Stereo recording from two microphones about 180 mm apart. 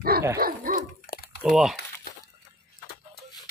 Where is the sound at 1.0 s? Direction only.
55° left (ahead or behind).